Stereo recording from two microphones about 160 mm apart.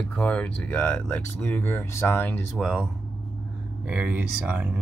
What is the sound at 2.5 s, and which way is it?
Speech, 5° right (ahead or behind).